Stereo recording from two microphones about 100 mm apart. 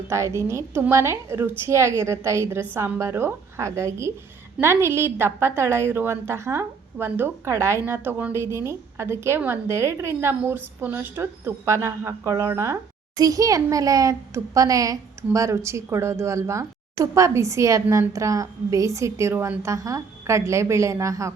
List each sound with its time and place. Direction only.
0.1 s a woman's voice: 30° right (ahead or behind)